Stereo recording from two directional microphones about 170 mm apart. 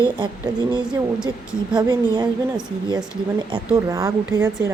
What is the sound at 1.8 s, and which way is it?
Speech, 25° right (ahead or behind).